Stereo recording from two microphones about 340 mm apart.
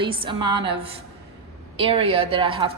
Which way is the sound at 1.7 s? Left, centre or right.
Centre.